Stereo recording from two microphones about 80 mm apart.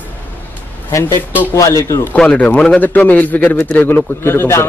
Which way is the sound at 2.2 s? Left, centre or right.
Centre.